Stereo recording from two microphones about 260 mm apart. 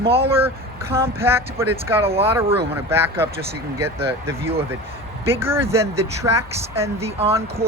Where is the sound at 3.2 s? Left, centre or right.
Right.